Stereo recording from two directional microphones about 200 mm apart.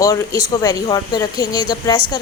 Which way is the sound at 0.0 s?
15° left (ahead or behind).